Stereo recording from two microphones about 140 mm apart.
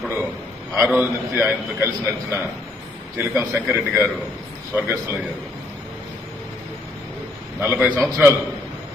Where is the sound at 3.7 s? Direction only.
15° right (ahead or behind).